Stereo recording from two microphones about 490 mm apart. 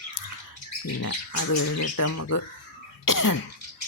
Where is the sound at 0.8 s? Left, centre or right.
Left.